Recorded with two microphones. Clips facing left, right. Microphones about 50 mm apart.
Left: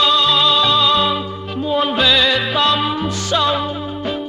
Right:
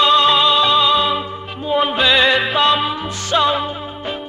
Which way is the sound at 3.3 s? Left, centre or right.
Centre.